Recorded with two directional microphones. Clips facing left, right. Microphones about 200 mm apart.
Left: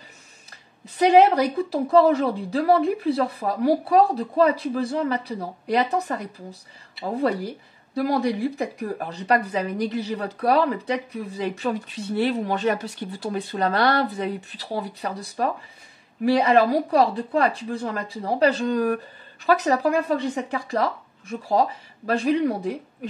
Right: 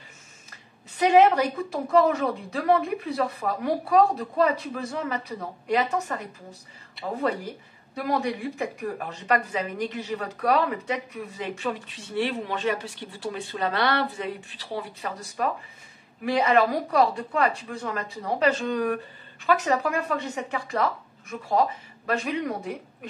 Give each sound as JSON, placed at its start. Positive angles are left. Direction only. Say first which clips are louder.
{"t": 0.8, "sound": "speech", "louder": "left 2 dB", "side_deg": 35}